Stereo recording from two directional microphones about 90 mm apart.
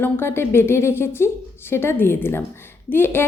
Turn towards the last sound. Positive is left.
turn(degrees=25)  # may be behind; listen again after turning